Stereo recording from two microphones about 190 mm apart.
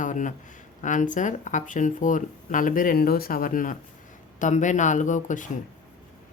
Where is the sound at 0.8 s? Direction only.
40° left (ahead or behind).